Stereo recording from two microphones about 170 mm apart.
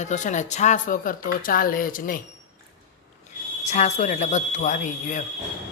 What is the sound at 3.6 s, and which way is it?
Speech, 40° left (ahead or behind).